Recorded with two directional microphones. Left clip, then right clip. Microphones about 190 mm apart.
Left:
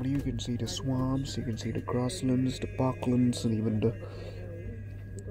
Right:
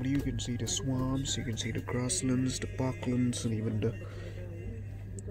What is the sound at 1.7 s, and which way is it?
Speech, 5° left (ahead or behind).